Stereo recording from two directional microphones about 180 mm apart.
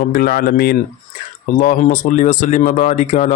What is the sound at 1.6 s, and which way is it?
Speech, 45° left (ahead or behind).